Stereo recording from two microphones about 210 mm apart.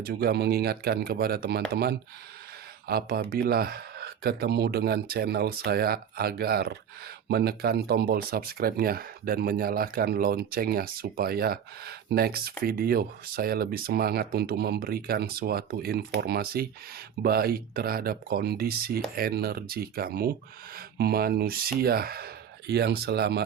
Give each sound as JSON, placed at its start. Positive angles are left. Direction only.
{"t": 0.0, "sound": "speech", "side_deg": -45}